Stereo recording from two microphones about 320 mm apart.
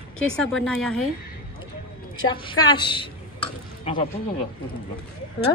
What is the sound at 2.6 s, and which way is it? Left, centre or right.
Stir, centre.